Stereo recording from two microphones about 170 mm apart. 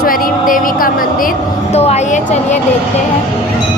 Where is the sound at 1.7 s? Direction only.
40° left (ahead or behind).